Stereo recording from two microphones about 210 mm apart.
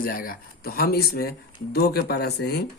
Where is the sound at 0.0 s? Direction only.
45° left (ahead or behind).